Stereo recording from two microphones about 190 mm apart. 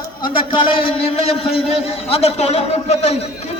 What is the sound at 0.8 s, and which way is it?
A man's voice, 30° left (ahead or behind).